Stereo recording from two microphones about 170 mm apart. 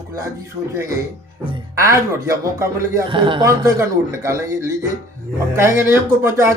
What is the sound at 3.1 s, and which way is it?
Speech, 30° right (ahead or behind).